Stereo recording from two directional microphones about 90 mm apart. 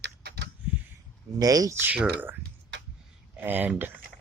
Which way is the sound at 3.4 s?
20° right (ahead or behind).